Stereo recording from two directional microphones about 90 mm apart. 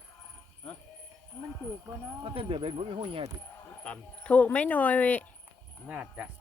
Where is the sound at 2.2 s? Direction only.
90° right.